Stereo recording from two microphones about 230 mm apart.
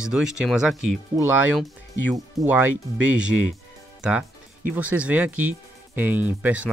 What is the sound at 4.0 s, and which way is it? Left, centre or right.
Speech, centre.